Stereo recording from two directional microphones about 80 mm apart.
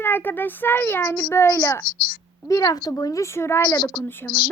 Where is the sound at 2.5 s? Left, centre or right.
Left.